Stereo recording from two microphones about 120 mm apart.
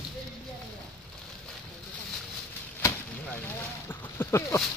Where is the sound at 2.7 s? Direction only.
20° left (ahead or behind).